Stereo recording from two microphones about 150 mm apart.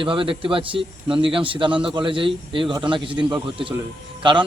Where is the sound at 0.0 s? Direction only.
35° right (ahead or behind).